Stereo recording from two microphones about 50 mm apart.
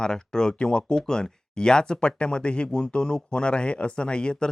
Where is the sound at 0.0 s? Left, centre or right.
Centre.